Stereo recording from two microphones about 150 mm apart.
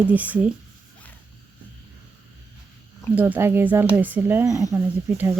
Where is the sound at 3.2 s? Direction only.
10° right (ahead or behind).